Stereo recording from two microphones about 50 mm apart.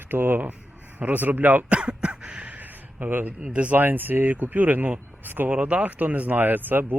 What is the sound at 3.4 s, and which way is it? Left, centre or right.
Speech, right.